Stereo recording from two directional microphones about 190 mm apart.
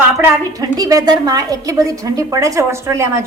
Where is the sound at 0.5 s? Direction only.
20° right (ahead or behind).